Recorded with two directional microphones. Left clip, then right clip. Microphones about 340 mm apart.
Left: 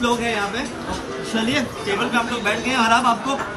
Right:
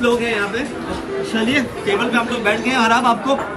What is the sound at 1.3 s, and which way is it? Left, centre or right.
A man's voice, centre.